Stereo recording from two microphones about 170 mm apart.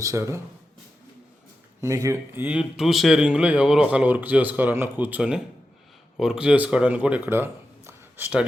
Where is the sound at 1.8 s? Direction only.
15° right (ahead or behind).